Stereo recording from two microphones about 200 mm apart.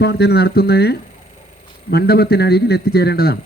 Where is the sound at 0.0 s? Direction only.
55° left (ahead or behind).